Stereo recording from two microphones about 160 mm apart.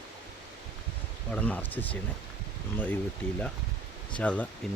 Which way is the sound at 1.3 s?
10° left (ahead or behind).